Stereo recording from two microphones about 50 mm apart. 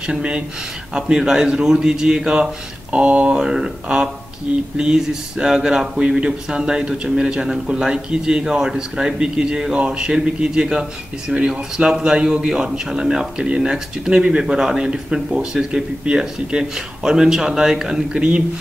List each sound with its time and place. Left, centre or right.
0.0 s speech: centre
14.4 s speech: centre